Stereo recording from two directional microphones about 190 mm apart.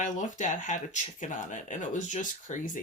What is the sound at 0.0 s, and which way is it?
Speech, 40° left (ahead or behind).